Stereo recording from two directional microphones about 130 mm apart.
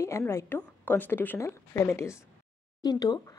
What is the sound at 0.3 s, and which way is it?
A woman's voice, 20° left (ahead or behind).